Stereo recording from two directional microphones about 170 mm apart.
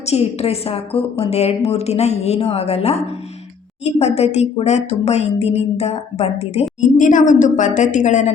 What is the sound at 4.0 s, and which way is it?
A woman's voice, 40° left (ahead or behind).